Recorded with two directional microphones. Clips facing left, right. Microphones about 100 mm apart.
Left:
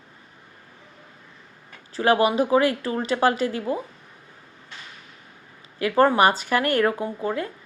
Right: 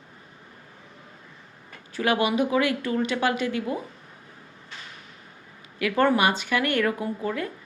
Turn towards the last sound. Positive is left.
turn(degrees=30)  # may be behind; listen again after turning